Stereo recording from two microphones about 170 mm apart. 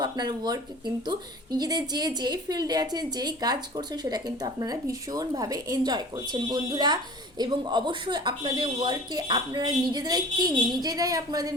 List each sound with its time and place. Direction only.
0.0 s a woman's voice: 25° right (ahead or behind)